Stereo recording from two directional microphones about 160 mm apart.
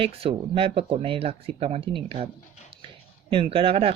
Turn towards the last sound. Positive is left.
turn(degrees=-35)  # may be behind; listen again after turning